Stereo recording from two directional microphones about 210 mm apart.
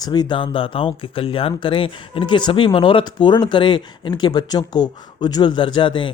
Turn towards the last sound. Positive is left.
turn(degrees=25)  # may be behind; listen again after turning